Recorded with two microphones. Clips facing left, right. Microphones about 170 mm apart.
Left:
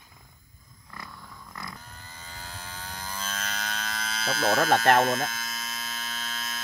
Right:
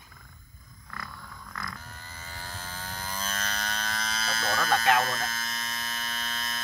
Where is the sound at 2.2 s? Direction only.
Centre (ahead or behind).